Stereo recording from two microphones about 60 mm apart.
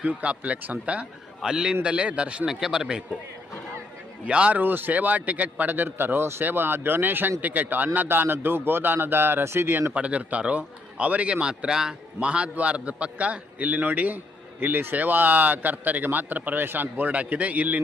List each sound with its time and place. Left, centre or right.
0.0 s a man's voice: right
1.4 s a man's voice: centre
2.5 s speech: centre
4.3 s speech: centre
4.5 s speech: right
9.9 s a man's voice: right